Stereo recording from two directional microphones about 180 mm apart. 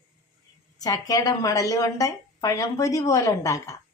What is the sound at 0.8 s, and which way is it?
A woman's voice, 20° left (ahead or behind).